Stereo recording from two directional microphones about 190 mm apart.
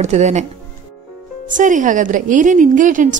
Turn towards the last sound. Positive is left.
turn(degrees=-45)  # may be behind; listen again after turning